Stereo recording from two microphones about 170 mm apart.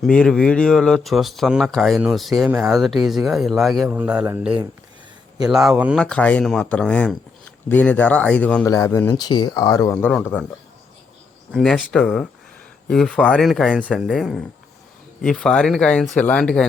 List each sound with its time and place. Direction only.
0.0 s speech: 5° left (ahead or behind)
6.0 s speech: 5° left (ahead or behind)
8.6 s speech: 20° left (ahead or behind)
9.9 s speech: 10° left (ahead or behind)
11.5 s speech: 5° left (ahead or behind)